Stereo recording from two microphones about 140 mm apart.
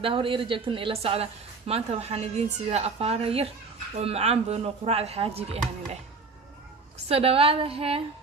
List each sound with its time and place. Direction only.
0.0 s speech: 40° right (ahead or behind)
7.1 s speech: 45° right (ahead or behind)